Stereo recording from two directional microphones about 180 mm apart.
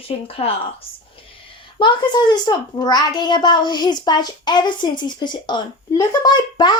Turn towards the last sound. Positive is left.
turn(degrees=25)  # may be behind; listen again after turning